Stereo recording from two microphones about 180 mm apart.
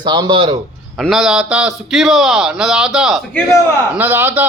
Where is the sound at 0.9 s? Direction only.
Centre (ahead or behind).